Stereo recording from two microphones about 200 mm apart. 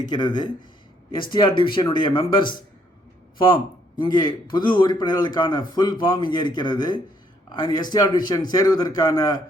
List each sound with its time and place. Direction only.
0.1 s speech: 20° left (ahead or behind)